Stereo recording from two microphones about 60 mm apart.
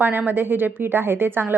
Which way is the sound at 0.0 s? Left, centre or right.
Right.